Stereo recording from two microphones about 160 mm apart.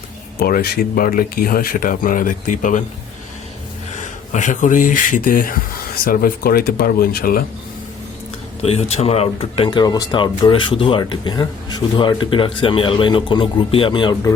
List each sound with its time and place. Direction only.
0.3 s speech: 70° left (ahead or behind); by 2.8 s 55° left (ahead or behind)
4.0 s speech: 50° left (ahead or behind); by 7.4 s 65° left (ahead or behind)
8.6 s speech: 40° left (ahead or behind)